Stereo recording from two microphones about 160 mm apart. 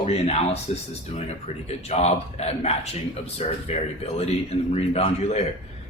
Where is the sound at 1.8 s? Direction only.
40° left (ahead or behind).